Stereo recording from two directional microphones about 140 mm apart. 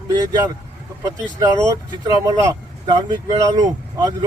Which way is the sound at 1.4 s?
25° right (ahead or behind).